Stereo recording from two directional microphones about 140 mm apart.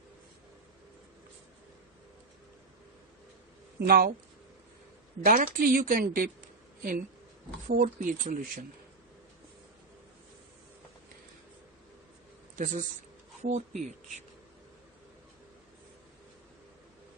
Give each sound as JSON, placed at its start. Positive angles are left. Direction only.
{"t": 3.8, "sound": "speech", "side_deg": -90}
{"t": 5.2, "sound": "a woman's voice", "side_deg": -90}
{"t": 7.7, "sound": "speech", "side_deg": -65}
{"t": 12.5, "sound": "speech", "side_deg": -60}